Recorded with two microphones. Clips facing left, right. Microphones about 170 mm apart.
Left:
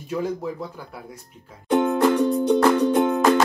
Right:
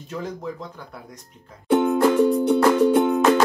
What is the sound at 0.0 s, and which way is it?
Speech, 10° left (ahead or behind).